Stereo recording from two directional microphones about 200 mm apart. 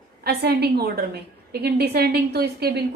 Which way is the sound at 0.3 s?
50° right (ahead or behind).